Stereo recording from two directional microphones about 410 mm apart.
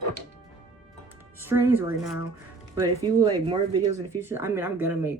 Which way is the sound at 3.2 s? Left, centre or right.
Centre.